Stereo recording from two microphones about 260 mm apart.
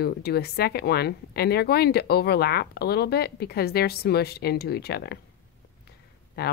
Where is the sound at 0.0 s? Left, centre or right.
Left.